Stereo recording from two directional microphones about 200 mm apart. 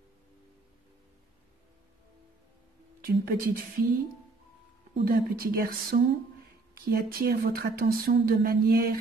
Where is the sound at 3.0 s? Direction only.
45° right (ahead or behind).